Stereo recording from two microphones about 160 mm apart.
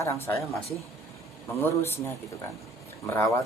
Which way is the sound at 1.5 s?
15° left (ahead or behind).